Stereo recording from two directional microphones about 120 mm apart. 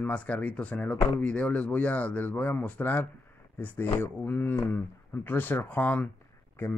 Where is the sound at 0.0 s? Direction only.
10° left (ahead or behind).